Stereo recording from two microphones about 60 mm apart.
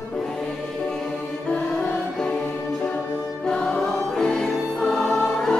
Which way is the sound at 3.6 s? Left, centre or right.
Centre.